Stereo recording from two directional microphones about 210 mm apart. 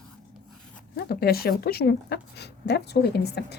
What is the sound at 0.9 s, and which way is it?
Speech, 45° left (ahead or behind).